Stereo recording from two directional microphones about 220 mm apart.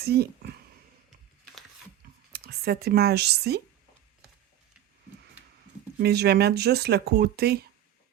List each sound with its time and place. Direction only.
0.0 s speech: 45° right (ahead or behind)
2.3 s speech: 45° right (ahead or behind)
6.0 s speech: 50° right (ahead or behind)